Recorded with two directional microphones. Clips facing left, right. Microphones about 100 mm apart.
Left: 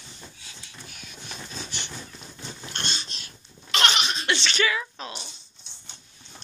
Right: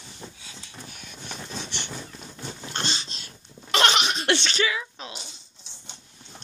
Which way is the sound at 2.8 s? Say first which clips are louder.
Right 2 dB; 90° right.